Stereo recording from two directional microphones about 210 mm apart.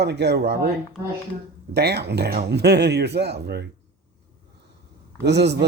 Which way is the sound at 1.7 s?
50° right (ahead or behind).